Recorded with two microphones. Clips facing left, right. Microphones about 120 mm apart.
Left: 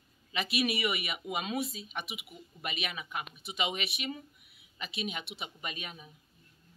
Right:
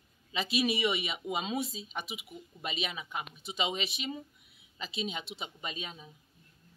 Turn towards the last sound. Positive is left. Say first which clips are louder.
# right 1 dB
turn(degrees=-25)  # may be behind; listen again after turning